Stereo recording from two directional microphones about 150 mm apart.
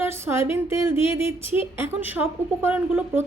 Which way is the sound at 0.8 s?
35° left (ahead or behind).